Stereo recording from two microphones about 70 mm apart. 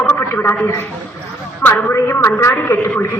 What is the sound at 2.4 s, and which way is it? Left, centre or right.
Speech, left.